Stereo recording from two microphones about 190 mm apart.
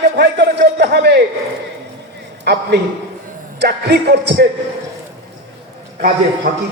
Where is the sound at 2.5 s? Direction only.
60° right (ahead or behind).